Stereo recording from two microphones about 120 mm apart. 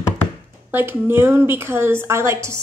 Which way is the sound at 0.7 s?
20° right (ahead or behind).